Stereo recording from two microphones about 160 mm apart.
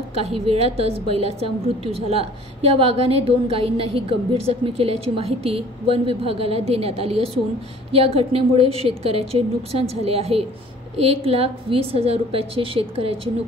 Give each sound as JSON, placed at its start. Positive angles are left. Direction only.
{"t": 0.2, "sound": "a woman's voice", "side_deg": -40}